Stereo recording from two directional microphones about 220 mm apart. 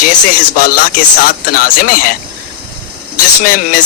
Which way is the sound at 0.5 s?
40° left (ahead or behind).